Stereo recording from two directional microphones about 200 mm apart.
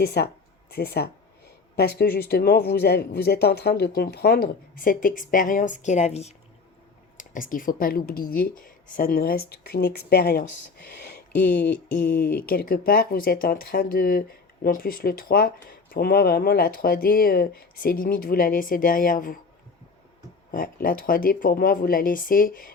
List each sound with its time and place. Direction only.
0.0 s speech: 50° left (ahead or behind)
20.5 s speech: 45° left (ahead or behind)